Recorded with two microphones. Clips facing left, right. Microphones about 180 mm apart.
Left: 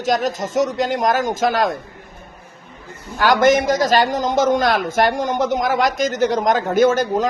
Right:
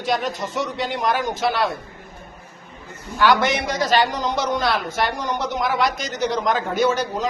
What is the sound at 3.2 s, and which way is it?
A man's voice, 45° left (ahead or behind).